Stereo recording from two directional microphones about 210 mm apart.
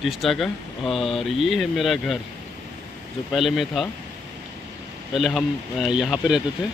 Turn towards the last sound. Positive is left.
turn(degrees=-5)  # may be behind; listen again after turning